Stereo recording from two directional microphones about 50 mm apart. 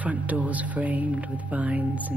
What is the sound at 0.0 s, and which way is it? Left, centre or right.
Speech, right.